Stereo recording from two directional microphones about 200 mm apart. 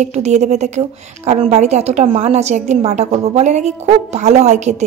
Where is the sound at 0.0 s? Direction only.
35° right (ahead or behind).